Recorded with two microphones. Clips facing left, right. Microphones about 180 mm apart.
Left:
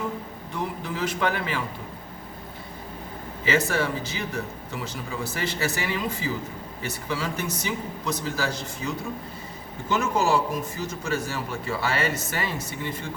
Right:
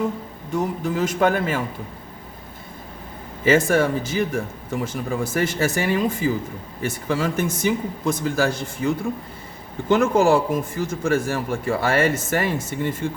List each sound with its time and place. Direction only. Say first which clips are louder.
0.5 s a man's voice: right 8 dB; 45° right (ahead or behind)
3.4 s a man's voice: right 7 dB; 45° right (ahead or behind)